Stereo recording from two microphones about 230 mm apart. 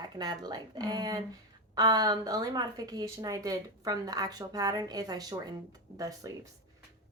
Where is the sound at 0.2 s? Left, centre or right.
Centre.